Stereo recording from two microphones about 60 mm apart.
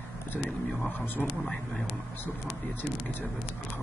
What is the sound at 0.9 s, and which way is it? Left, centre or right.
Speech, left.